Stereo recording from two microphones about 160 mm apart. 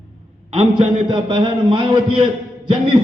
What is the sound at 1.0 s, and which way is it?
A man's voice, 30° right (ahead or behind).